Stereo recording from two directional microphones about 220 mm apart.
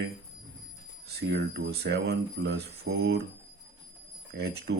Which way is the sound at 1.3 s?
50° right (ahead or behind).